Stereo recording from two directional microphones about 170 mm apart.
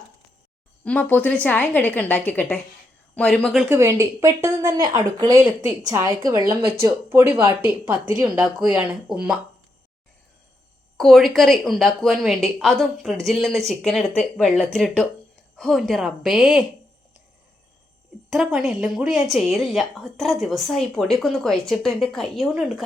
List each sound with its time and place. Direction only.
0.9 s a woman's voice: 10° left (ahead or behind)
3.8 s a woman's voice: 15° right (ahead or behind)
10.9 s a woman's voice: centre (ahead or behind)
18.3 s a woman's voice: centre (ahead or behind)